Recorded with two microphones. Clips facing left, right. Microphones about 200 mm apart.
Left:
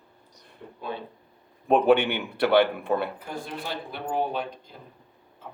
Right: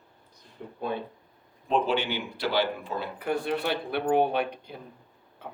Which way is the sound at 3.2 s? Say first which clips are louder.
Right 7 dB; 65° right (ahead or behind).